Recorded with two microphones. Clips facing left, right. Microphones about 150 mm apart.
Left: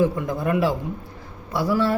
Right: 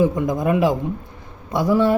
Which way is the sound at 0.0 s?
15° right (ahead or behind).